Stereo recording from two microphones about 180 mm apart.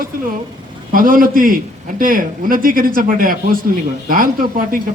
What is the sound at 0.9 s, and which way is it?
A man's voice, 50° right (ahead or behind).